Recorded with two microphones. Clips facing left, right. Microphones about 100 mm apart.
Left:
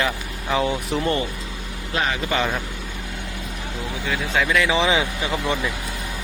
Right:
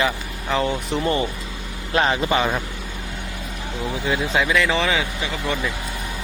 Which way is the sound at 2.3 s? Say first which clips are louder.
Even; 10° right (ahead or behind).